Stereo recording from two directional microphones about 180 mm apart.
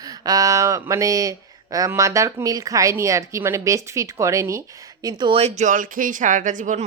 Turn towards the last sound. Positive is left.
turn(degrees=-45)  # may be behind; listen again after turning